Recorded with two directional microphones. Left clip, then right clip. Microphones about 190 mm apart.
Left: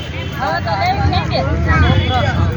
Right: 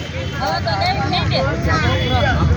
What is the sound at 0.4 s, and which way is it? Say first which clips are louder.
Speech: left 2 dB; 10° right (ahead or behind).